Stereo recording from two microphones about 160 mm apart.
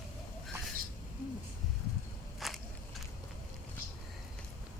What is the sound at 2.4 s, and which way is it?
Walk, centre (ahead or behind).